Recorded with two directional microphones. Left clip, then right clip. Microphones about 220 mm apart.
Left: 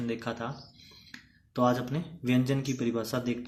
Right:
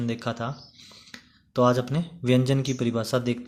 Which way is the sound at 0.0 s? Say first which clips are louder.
Right 4 dB; 45° right (ahead or behind).